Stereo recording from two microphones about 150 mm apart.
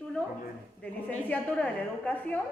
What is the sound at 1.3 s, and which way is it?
A woman's voice, 10° left (ahead or behind).